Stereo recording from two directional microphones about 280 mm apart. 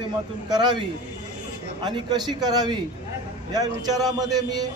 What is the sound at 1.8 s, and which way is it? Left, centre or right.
A man's voice, centre.